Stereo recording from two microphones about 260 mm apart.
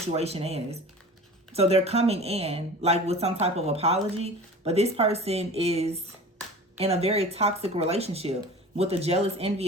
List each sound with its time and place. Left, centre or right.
0.1 s speech: right